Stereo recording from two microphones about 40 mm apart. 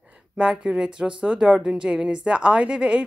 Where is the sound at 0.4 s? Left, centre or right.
Centre.